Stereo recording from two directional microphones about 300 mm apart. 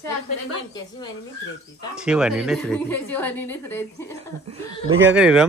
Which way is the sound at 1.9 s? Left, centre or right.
Centre.